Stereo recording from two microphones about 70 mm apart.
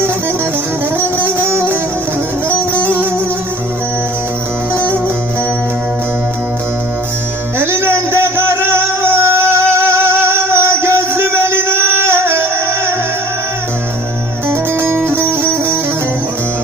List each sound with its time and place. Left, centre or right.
0.9 s music: right
2.8 s music: right
4.7 s music: right
7.6 s music: right
14.4 s music: right